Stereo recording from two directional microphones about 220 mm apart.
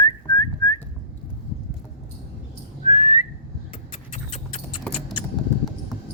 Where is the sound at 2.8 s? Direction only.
30° left (ahead or behind).